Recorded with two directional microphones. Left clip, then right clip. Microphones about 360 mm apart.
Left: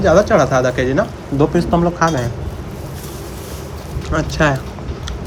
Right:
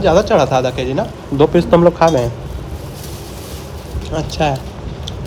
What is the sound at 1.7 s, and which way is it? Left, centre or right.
Speech, right.